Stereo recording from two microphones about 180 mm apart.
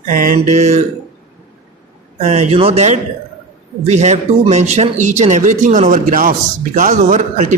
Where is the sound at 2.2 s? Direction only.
35° right (ahead or behind).